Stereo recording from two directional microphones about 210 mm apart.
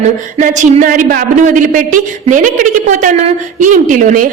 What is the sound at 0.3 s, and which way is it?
A woman's voice, 35° right (ahead or behind).